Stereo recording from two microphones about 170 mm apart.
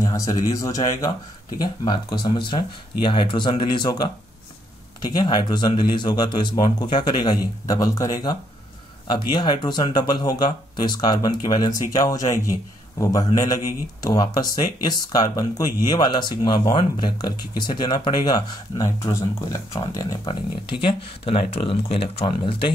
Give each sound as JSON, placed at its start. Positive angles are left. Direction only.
{"t": 0.0, "sound": "speech", "side_deg": 20}
{"t": 20.2, "sound": "speech", "side_deg": 30}